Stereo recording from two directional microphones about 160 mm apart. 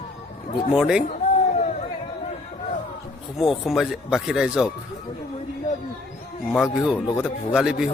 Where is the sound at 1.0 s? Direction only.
45° left (ahead or behind).